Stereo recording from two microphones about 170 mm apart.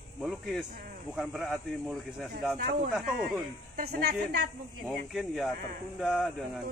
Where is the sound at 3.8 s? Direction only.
70° right (ahead or behind).